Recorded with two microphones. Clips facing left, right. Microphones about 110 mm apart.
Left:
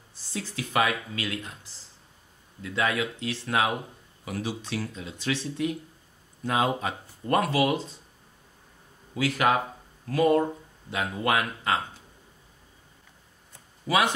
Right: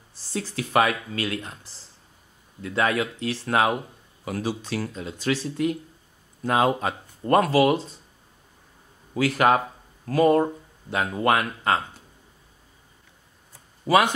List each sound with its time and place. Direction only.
0.3 s speech: 45° right (ahead or behind)
2.6 s speech: 45° right (ahead or behind)
9.1 s speech: 45° right (ahead or behind)